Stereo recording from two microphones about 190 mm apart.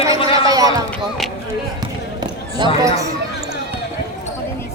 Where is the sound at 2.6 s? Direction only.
25° right (ahead or behind).